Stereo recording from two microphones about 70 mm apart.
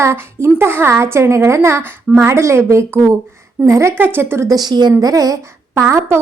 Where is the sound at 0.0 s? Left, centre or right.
Right.